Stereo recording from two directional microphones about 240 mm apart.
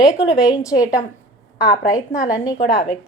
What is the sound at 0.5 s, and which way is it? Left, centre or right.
A woman's voice, centre.